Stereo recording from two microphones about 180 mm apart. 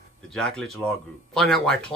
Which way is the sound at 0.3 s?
5° left (ahead or behind).